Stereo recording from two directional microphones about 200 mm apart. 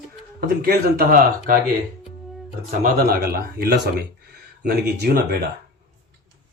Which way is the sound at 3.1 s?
50° right (ahead or behind).